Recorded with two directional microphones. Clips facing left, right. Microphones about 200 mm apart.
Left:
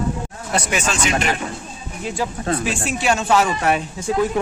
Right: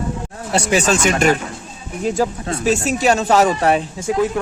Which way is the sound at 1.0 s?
45° right (ahead or behind).